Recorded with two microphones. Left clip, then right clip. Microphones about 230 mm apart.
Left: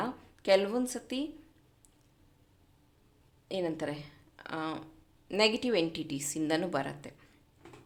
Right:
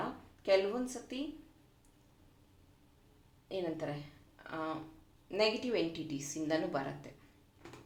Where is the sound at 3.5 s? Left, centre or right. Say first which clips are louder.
Left 4 dB; left.